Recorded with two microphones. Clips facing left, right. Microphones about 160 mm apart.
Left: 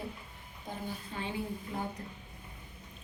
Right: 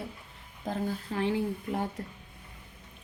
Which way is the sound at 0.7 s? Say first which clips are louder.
Right 8 dB; 90° right.